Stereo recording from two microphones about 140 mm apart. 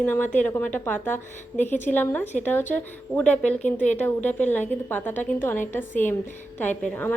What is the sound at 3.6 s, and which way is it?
Speech, 60° left (ahead or behind).